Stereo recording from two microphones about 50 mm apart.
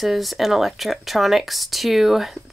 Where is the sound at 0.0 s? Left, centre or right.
Centre.